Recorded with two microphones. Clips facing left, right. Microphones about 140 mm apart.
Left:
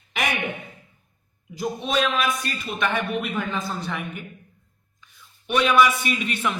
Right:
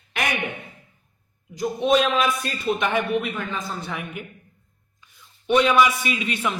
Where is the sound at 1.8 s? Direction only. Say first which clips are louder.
Right 5 dB; 20° right (ahead or behind).